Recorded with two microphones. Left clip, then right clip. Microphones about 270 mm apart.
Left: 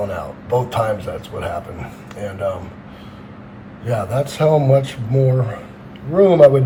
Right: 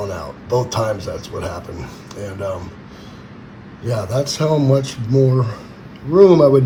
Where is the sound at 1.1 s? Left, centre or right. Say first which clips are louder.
Even; centre.